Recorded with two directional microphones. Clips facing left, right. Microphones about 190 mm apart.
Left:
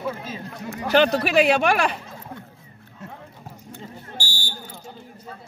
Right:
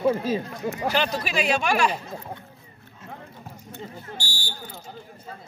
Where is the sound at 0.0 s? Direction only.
35° right (ahead or behind).